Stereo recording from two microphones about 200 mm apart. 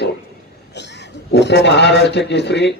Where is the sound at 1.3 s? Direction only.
60° left (ahead or behind).